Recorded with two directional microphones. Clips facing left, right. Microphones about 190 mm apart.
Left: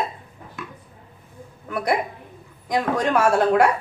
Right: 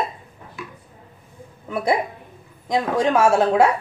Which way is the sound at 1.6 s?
25° right (ahead or behind).